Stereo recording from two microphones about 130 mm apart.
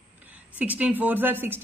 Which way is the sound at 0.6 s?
10° right (ahead or behind).